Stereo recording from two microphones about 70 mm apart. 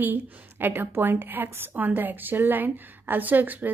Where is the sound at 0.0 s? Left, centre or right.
Right.